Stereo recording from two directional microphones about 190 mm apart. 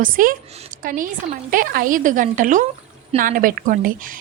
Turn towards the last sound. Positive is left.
turn(degrees=-50)  # may be behind; listen again after turning